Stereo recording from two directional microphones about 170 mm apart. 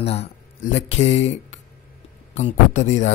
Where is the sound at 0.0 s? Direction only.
35° left (ahead or behind).